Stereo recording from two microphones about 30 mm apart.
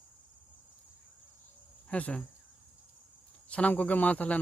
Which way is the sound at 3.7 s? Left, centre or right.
Left.